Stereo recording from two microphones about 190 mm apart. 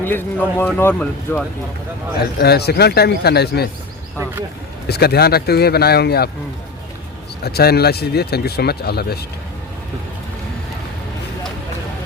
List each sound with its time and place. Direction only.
0.0 s speech: 10° left (ahead or behind)
2.4 s speech: 55° left (ahead or behind)
4.9 s speech: 55° left (ahead or behind)
7.4 s speech: 55° left (ahead or behind)